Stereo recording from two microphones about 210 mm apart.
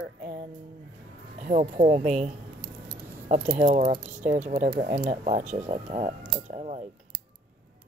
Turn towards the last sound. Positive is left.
turn(degrees=-30)  # may be behind; listen again after turning